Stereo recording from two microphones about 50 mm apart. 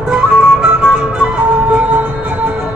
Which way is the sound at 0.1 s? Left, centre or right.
Right.